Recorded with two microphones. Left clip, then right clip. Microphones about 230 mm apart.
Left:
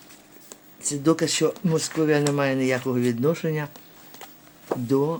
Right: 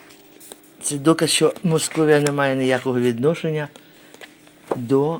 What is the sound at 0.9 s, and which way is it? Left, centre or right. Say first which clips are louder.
Speech: right 4 dB; centre.